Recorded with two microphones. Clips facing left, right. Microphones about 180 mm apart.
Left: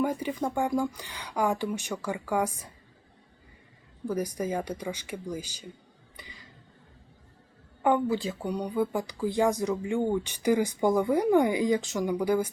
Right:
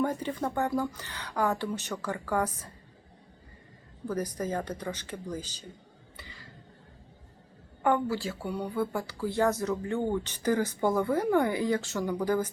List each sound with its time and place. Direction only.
0.0 s speech: 10° left (ahead or behind)
4.0 s speech: 10° left (ahead or behind)
6.1 s a sound: 15° left (ahead or behind)
7.8 s speech: 15° left (ahead or behind)